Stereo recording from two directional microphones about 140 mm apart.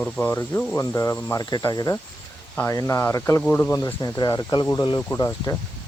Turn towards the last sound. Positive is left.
turn(degrees=25)  # may be behind; listen again after turning